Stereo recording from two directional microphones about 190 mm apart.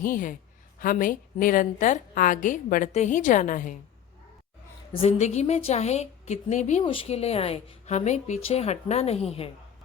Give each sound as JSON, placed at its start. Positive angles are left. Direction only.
{"t": 0.0, "sound": "a woman's voice", "side_deg": 45}
{"t": 4.9, "sound": "a woman's voice", "side_deg": 30}